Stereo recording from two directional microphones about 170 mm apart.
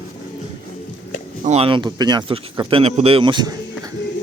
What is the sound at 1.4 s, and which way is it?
Speech, 35° right (ahead or behind).